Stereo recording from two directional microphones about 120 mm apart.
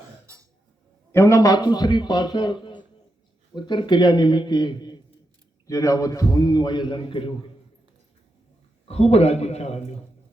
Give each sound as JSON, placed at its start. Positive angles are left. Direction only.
{"t": 1.1, "sound": "a man's voice", "side_deg": 25}
{"t": 8.9, "sound": "a man's voice", "side_deg": 60}